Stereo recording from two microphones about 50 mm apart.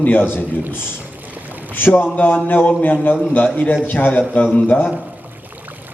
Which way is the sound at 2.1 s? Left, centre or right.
Left.